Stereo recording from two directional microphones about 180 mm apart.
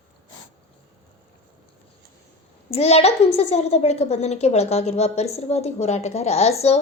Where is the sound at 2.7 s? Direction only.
35° left (ahead or behind).